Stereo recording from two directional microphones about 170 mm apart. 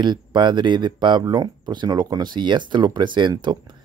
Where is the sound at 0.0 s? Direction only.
25° right (ahead or behind).